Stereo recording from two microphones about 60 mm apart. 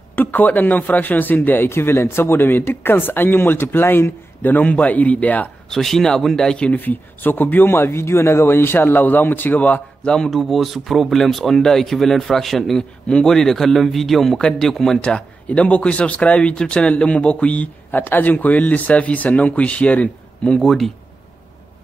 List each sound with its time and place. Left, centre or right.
0.1 s speech: left
1.7 s speech: left
5.7 s speech: centre
6.8 s speech: left
10.0 s a man's voice: centre
15.0 s speech: centre
20.6 s a man's voice: centre